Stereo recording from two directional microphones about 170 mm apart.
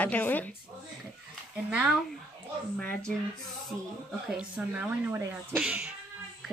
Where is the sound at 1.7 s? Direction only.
5° right (ahead or behind).